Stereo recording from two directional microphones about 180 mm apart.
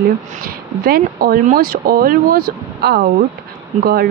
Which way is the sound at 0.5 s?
55° right (ahead or behind).